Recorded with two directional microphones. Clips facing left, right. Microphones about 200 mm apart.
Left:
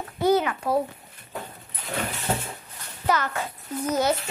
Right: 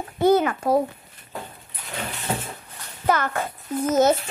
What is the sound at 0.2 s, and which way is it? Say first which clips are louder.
Speech: right 3 dB; 50° right (ahead or behind).